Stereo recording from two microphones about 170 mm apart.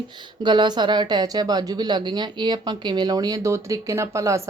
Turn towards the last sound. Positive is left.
turn(degrees=-15)  # may be behind; listen again after turning